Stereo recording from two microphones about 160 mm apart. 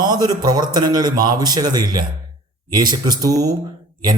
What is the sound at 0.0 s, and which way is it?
A man's voice, 25° right (ahead or behind).